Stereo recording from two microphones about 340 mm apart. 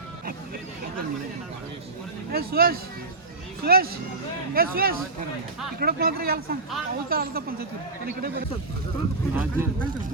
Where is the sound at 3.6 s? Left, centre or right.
Right.